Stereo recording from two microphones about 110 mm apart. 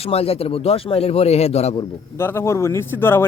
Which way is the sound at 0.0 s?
65° left (ahead or behind).